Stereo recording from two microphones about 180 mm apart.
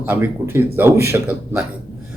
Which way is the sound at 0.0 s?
10° right (ahead or behind).